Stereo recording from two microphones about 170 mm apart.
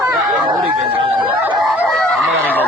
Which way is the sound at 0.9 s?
30° right (ahead or behind).